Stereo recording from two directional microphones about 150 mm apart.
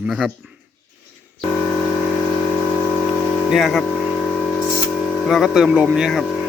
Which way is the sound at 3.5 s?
Centre (ahead or behind).